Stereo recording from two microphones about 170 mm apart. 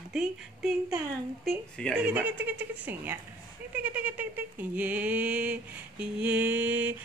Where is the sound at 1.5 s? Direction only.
Centre (ahead or behind).